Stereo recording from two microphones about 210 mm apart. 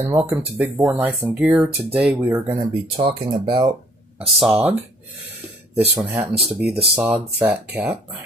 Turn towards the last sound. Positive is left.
turn(degrees=-5)  # may be behind; listen again after turning